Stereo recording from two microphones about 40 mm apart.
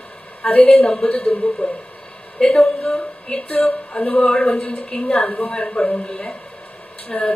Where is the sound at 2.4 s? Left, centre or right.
Centre.